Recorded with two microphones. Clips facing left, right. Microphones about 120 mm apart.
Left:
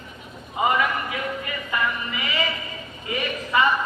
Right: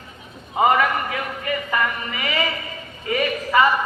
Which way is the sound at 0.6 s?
55° right (ahead or behind).